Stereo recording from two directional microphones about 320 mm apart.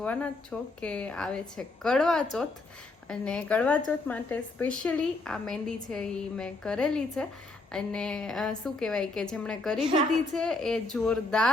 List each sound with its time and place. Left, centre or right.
0.0 s a woman's voice: centre